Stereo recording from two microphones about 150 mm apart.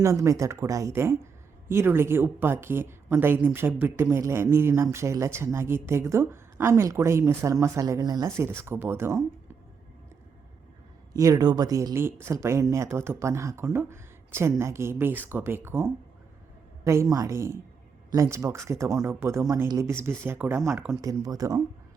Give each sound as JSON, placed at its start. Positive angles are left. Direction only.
{"t": 0.0, "sound": "speech", "side_deg": -20}
{"t": 11.1, "sound": "a woman's voice", "side_deg": -20}